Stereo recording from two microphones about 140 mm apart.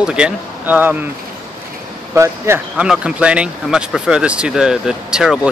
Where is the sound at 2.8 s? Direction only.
5° right (ahead or behind).